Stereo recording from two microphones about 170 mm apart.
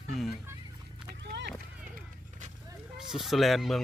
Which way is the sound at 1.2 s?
90° right.